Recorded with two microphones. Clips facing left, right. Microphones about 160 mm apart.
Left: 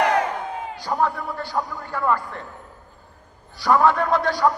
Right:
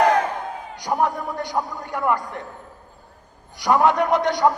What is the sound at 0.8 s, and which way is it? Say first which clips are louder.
A man's voice: right 2 dB; 15° right (ahead or behind).